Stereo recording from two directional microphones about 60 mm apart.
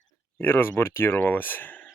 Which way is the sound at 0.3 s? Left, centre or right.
Left.